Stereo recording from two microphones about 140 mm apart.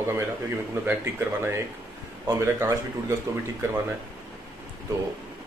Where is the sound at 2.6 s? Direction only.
20° right (ahead or behind).